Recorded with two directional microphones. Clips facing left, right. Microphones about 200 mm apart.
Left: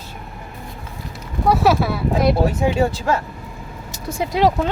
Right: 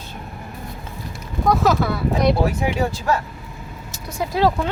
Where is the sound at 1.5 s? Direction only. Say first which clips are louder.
Left 1 dB; 10° left (ahead or behind).